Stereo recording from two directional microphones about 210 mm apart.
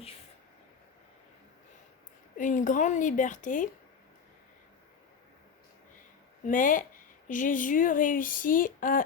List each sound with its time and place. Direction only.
2.4 s speech: 40° left (ahead or behind)
6.4 s speech: 40° left (ahead or behind)